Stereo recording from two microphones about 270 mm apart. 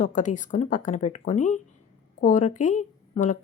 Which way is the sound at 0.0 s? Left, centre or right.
Left.